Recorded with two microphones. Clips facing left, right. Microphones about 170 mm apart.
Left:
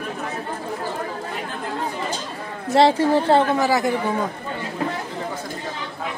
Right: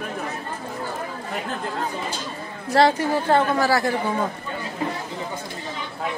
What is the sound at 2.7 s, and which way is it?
A woman's voice, 25° left (ahead or behind).